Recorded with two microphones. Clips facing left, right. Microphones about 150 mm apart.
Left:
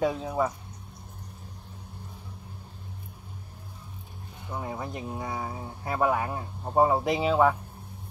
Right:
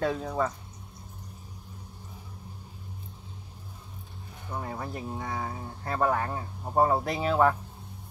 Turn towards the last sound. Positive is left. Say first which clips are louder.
# left 2 dB
turn(degrees=10)  # may be behind; listen again after turning